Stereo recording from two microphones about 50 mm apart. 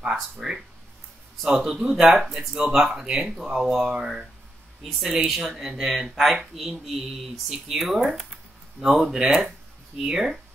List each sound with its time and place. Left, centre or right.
0.0 s speech: centre
5.3 s speech: centre